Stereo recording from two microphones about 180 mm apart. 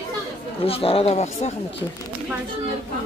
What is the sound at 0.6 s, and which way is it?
Speech, 30° left (ahead or behind).